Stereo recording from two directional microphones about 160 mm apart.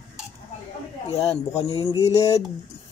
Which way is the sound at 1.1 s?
40° left (ahead or behind).